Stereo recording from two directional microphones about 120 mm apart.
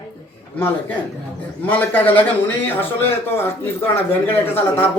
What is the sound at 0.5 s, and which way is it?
Speech, 15° left (ahead or behind).